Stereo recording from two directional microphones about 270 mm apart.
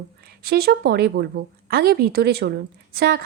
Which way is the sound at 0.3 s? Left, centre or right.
Right.